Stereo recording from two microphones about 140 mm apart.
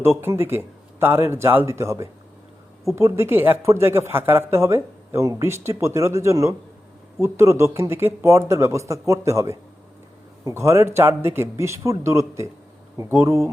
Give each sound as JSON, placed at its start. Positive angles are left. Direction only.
{"t": 0.0, "sound": "speech", "side_deg": -15}